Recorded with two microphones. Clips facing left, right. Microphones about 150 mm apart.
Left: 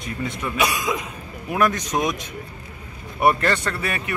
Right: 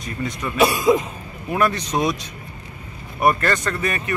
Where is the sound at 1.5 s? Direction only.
15° left (ahead or behind).